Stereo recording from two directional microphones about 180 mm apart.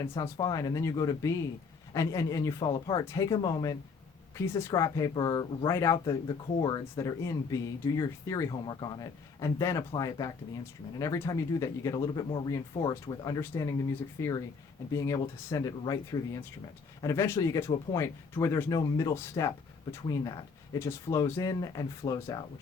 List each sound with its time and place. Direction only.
0.2 s speech: 20° left (ahead or behind)